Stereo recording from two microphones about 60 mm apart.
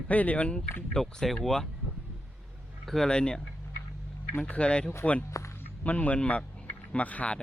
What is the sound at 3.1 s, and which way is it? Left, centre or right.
Speech, centre.